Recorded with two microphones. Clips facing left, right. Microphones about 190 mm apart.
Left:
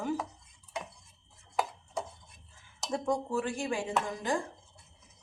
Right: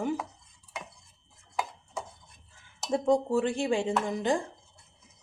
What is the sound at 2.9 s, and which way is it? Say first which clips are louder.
A woman's voice: right 6 dB; 25° right (ahead or behind).